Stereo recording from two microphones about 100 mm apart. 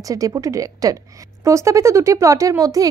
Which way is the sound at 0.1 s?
35° right (ahead or behind).